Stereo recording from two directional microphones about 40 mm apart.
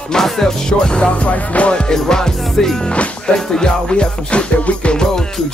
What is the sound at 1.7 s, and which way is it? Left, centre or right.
Music, centre.